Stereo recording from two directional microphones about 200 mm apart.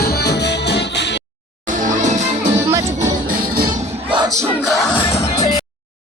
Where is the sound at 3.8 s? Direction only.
30° right (ahead or behind).